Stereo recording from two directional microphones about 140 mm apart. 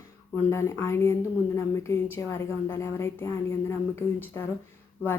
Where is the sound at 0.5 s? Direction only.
20° left (ahead or behind).